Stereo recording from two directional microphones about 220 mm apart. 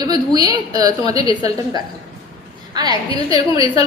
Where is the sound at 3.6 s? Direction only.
15° right (ahead or behind).